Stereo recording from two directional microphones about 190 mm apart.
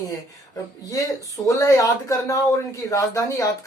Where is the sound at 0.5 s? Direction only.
20° left (ahead or behind).